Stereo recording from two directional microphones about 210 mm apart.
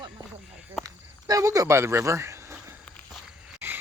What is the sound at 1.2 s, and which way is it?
Speech, 15° right (ahead or behind).